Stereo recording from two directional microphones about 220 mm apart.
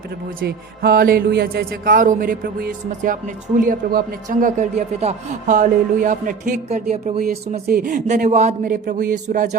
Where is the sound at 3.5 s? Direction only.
40° right (ahead or behind).